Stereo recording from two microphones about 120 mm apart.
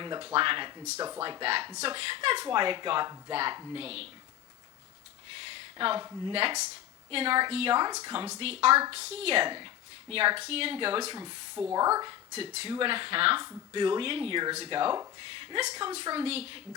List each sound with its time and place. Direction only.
0.0 s speech: 40° right (ahead or behind)
0.9 s speech: 25° right (ahead or behind)
1.2 s a woman's voice: 40° right (ahead or behind); by 4.1 s 55° right (ahead or behind)
5.5 s a sound: 45° right (ahead or behind)
6.0 s speech: 30° right (ahead or behind)
7.1 s speech: 50° right (ahead or behind)
7.8 s speech: 35° right (ahead or behind)
8.4 s a woman's voice: 55° right (ahead or behind)
9.5 s speech: 40° right (ahead or behind)
11.7 s speech: 30° right (ahead or behind)
12.3 s speech: 50° right (ahead or behind)
15.7 s speech: 30° right (ahead or behind)
16.1 s speech: 55° right (ahead or behind)